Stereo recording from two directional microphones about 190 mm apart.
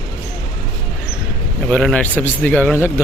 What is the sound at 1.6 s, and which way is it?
A man's voice, 5° left (ahead or behind).